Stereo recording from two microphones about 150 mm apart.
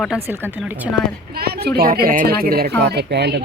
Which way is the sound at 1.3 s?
90° right.